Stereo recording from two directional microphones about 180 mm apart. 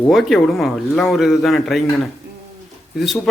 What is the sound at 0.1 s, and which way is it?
A man's voice, centre (ahead or behind).